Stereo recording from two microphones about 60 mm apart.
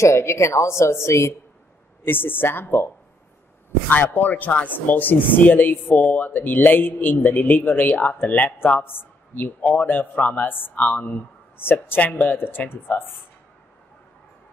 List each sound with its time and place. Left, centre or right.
0.0 s a woman's voice: left
2.0 s speech: left
3.9 s speech: left